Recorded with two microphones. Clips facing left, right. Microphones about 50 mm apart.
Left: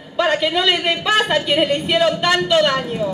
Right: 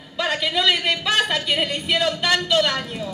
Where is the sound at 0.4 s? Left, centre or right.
Centre.